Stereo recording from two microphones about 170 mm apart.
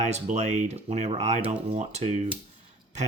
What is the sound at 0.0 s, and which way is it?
Speech, 40° right (ahead or behind).